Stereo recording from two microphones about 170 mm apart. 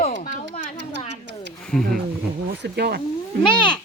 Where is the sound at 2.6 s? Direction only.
75° right (ahead or behind).